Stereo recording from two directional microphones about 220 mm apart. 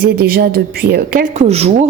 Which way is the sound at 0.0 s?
45° right (ahead or behind).